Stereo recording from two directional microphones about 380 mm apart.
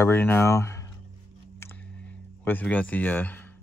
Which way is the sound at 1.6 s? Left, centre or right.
Centre.